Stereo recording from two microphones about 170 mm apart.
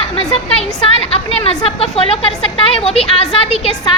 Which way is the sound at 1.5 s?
35° left (ahead or behind).